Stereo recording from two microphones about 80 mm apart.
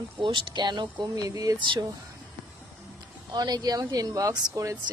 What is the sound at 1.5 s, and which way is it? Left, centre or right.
Speech, right.